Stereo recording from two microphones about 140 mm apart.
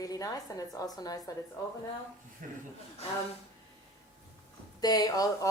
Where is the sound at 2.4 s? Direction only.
80° right.